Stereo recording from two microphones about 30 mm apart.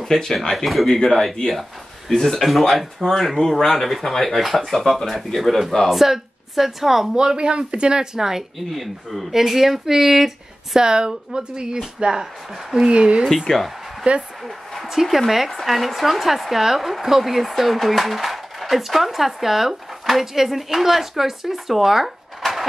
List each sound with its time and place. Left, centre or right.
0.0 s speech: centre
5.9 s speech: centre
7.3 s speech: right; by 8.5 s centre
8.7 s speech: centre
10.8 s speech: right
12.0 s speech: right
12.7 s speech: centre
13.5 s speech: centre
14.0 s speech: right
14.9 s speech: centre
22.4 s a sound: centre